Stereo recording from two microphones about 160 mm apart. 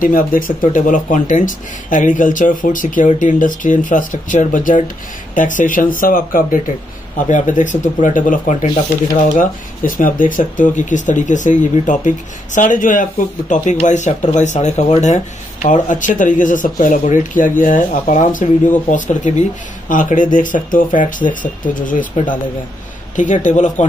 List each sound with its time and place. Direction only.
0.0 s speech: 60° left (ahead or behind)
7.2 s speech: 50° left (ahead or behind)